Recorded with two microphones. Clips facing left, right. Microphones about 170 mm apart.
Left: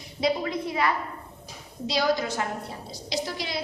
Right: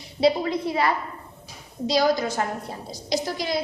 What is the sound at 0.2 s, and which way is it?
Speech, 30° right (ahead or behind).